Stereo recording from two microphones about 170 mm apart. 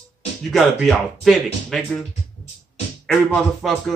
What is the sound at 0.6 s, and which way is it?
Speech, centre (ahead or behind).